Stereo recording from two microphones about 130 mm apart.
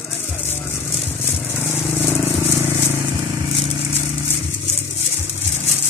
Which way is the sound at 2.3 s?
20° right (ahead or behind).